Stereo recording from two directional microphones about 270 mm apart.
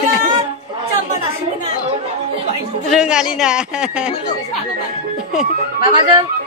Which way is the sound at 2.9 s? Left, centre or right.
Centre.